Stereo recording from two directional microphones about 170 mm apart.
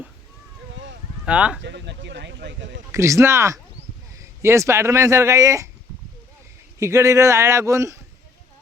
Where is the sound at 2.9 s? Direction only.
15° right (ahead or behind).